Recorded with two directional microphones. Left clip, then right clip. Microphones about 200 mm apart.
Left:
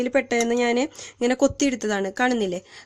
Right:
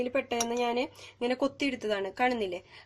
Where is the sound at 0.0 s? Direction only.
45° left (ahead or behind).